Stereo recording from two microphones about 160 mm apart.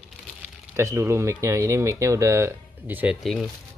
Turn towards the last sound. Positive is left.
turn(degrees=0)  # may be behind; listen again after turning